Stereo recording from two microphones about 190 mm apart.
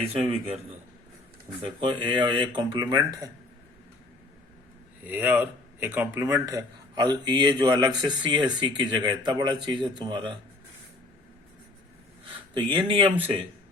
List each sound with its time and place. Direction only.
0.1 s a man's voice: 30° right (ahead or behind)
1.6 s speech: 25° right (ahead or behind)
5.0 s speech: 10° right (ahead or behind)
12.5 s speech: 25° right (ahead or behind)